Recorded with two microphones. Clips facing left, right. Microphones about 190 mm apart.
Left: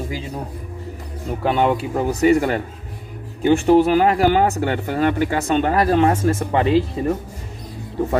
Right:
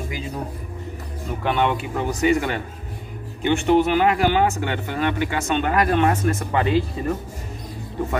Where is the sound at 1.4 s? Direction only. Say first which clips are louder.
Left 4 dB; 35° left (ahead or behind).